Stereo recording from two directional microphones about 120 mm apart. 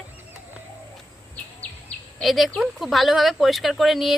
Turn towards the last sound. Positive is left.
turn(degrees=0)  # may be behind; listen again after turning